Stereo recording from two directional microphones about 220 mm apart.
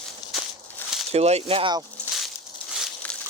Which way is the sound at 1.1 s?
30° right (ahead or behind).